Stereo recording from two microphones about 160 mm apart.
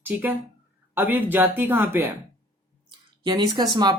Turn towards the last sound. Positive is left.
turn(degrees=-25)  # may be behind; listen again after turning